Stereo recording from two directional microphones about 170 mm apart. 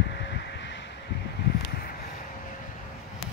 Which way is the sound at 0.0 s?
90° left.